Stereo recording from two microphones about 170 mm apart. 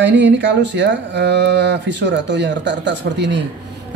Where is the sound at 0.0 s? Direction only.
90° right.